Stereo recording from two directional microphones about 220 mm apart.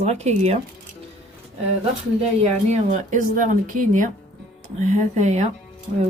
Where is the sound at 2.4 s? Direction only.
30° right (ahead or behind).